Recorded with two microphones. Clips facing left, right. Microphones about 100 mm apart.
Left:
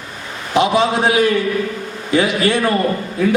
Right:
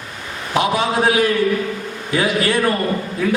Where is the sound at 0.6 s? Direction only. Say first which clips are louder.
Left 3 dB; 25° left (ahead or behind).